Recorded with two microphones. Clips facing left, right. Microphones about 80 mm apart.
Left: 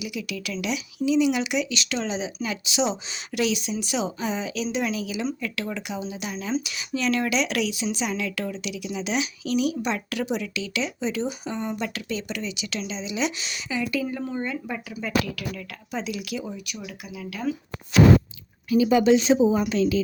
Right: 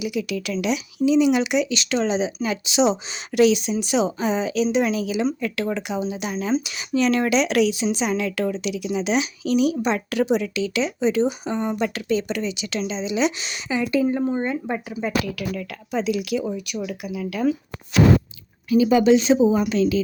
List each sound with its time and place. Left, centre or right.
0.0 s speech: right
15.5 s speech: right
18.9 s speech: right